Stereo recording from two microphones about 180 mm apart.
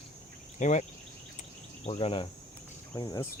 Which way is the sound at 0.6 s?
40° left (ahead or behind).